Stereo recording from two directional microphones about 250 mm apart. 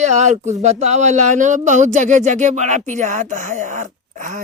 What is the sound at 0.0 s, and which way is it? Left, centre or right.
Speech, right.